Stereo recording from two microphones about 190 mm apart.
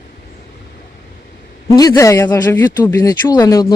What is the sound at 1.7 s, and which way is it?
Speech, 20° left (ahead or behind).